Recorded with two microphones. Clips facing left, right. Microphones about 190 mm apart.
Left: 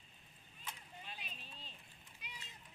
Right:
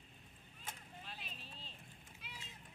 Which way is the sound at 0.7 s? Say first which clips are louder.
Even; 45° right (ahead or behind).